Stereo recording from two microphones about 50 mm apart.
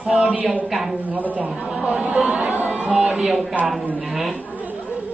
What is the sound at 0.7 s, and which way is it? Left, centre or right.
Speech, centre.